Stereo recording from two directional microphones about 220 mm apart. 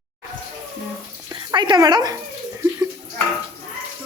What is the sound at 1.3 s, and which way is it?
Speech, 20° right (ahead or behind).